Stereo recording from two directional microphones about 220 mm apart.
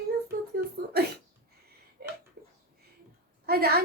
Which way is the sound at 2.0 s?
45° right (ahead or behind).